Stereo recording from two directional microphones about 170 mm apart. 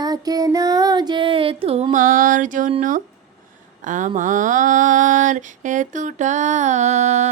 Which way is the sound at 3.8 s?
50° right (ahead or behind).